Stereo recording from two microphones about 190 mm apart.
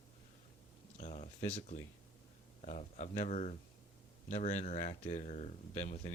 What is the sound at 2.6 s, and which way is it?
Speech, 35° left (ahead or behind).